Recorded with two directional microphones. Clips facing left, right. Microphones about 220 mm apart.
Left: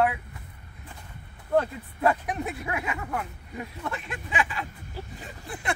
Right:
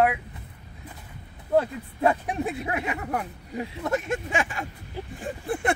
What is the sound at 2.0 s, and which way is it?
Speech, 25° right (ahead or behind).